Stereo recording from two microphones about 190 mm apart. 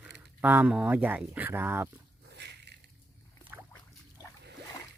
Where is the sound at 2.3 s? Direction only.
60° right (ahead or behind).